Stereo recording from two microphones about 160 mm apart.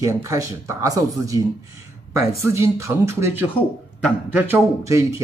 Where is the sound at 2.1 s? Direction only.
15° right (ahead or behind).